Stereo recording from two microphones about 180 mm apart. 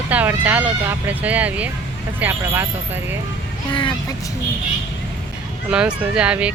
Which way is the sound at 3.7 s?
25° left (ahead or behind).